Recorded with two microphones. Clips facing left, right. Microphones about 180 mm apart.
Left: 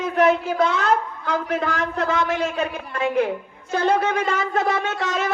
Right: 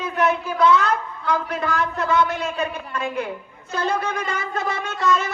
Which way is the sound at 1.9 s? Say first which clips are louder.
Even; 90° left.